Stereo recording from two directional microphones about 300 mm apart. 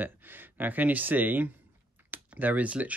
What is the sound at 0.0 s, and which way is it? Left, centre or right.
Speech, centre.